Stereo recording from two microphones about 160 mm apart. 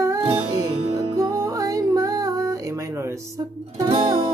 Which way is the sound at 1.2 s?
20° right (ahead or behind).